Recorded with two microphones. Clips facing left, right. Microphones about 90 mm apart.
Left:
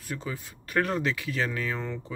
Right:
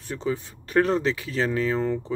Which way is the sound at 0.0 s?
30° right (ahead or behind).